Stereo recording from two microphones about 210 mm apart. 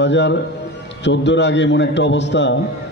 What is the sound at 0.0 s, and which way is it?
A man's voice, 60° left (ahead or behind).